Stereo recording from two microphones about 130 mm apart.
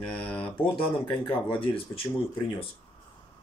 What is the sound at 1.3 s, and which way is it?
Speech, 45° left (ahead or behind).